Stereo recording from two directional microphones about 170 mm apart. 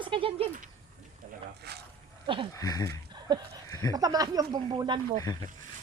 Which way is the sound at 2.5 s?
20° left (ahead or behind).